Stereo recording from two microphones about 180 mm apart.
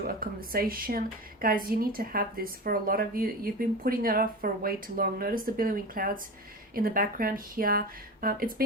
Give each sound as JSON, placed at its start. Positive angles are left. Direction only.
{"t": 0.0, "sound": "a woman's voice", "side_deg": -55}